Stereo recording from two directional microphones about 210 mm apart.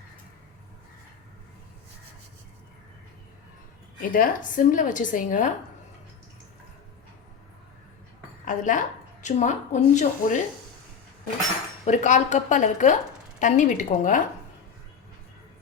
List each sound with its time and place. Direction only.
4.1 s a woman's voice: 40° left (ahead or behind)
8.4 s a sound: 40° left (ahead or behind)
9.2 s a woman's voice: 35° left (ahead or behind)
11.9 s a woman's voice: 35° left (ahead or behind)